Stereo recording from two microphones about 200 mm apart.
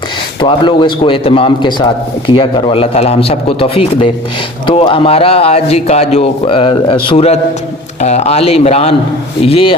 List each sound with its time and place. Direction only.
0.3 s a man's voice: 25° left (ahead or behind)